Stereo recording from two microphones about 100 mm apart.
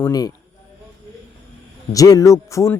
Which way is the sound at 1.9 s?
35° left (ahead or behind).